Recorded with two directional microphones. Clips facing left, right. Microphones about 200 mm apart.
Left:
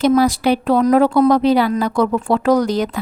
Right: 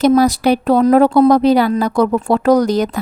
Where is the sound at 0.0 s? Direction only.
40° right (ahead or behind).